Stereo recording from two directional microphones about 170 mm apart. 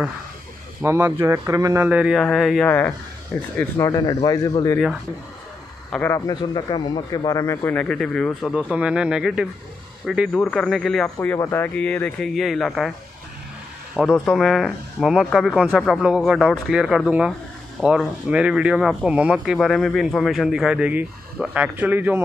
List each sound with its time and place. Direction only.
0.8 s speech: 15° right (ahead or behind)
1.9 s speech: 5° right (ahead or behind)
3.5 s speech: 15° left (ahead or behind)
5.9 s speech: 10° left (ahead or behind)
6.1 s speech: 25° left (ahead or behind); by 11.1 s centre (ahead or behind)
11.1 s speech: 15° left (ahead or behind); by 12.9 s centre (ahead or behind)
13.9 s speech: centre (ahead or behind)